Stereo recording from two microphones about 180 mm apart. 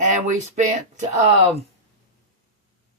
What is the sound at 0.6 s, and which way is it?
Speech, 40° right (ahead or behind).